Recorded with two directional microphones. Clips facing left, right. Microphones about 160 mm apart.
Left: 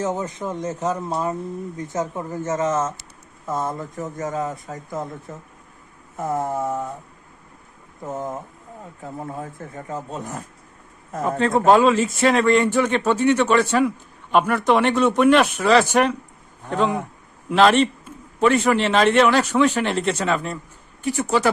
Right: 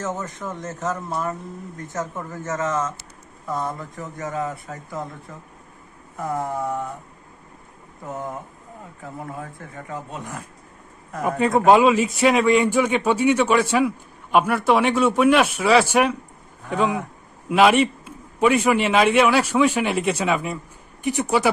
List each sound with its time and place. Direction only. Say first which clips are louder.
0.0 s a man's voice: left 4 dB; 15° left (ahead or behind)
8.0 s speech: left 2 dB; 20° left (ahead or behind)
11.2 s a man's voice: even; 15° right (ahead or behind)